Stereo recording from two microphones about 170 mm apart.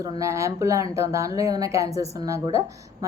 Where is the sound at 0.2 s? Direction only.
15° right (ahead or behind).